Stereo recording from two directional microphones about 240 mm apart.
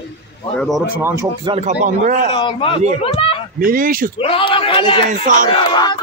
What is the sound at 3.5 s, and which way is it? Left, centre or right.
Speech, right.